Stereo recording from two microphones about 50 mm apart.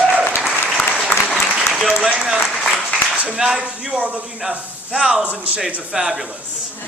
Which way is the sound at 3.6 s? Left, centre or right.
Right.